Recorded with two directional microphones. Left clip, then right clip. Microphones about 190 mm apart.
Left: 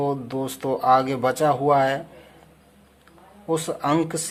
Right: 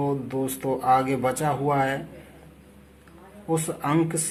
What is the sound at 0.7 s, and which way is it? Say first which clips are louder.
Speech: left 3 dB; 70° left (ahead or behind).